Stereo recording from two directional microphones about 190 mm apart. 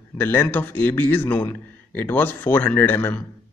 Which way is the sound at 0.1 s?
10° left (ahead or behind).